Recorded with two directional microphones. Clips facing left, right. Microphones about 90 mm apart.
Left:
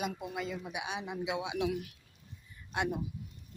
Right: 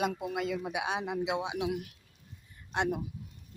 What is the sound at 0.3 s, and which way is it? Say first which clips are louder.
Speech: right 5 dB; 80° right.